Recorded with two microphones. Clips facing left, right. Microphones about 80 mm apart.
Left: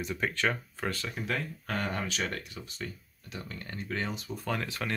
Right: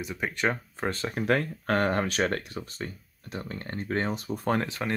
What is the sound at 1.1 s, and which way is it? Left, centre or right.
Speech, right.